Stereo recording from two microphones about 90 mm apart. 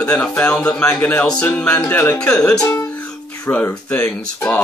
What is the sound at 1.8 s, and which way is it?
Speech, 20° left (ahead or behind).